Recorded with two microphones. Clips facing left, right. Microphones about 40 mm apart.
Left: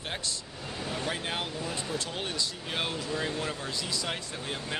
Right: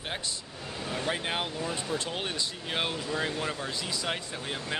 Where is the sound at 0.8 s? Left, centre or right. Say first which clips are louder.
Right 1 dB; centre.